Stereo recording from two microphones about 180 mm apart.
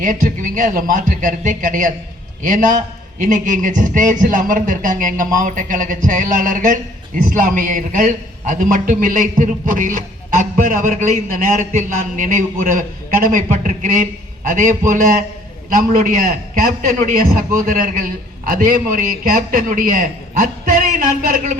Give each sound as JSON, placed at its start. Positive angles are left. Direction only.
{"t": 0.0, "sound": "a man's voice", "side_deg": -45}